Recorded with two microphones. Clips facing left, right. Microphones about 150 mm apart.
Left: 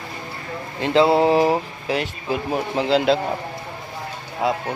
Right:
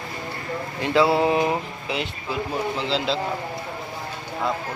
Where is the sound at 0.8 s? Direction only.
25° left (ahead or behind).